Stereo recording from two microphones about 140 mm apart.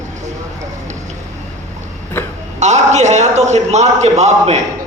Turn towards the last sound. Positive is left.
turn(degrees=-55)  # may be behind; listen again after turning